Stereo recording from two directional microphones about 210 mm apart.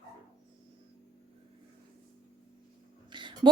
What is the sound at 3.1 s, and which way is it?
Music, 20° right (ahead or behind).